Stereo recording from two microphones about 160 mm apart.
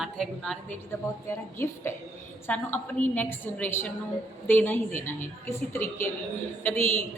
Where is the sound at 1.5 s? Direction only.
15° left (ahead or behind).